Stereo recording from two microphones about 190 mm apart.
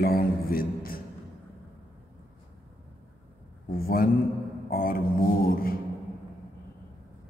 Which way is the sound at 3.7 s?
50° left (ahead or behind).